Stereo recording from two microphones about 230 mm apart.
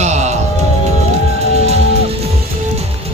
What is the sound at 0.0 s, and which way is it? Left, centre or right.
Music, right.